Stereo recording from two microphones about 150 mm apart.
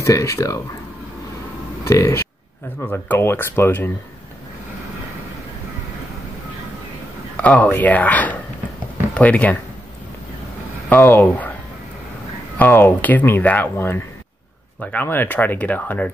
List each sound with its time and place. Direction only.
0.0 s speech: 20° left (ahead or behind)
1.9 s speech: 20° left (ahead or behind)
7.3 s speech: 10° left (ahead or behind)
10.9 s speech: 15° left (ahead or behind)
12.5 s speech: 15° left (ahead or behind)